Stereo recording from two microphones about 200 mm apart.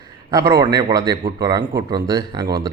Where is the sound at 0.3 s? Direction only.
15° right (ahead or behind).